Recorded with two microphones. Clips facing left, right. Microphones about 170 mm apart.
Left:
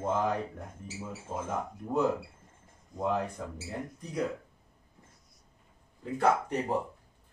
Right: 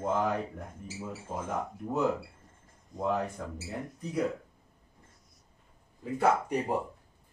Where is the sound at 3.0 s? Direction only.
Centre (ahead or behind).